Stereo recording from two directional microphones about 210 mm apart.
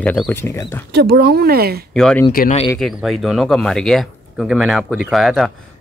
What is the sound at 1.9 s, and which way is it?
Speech, 5° left (ahead or behind).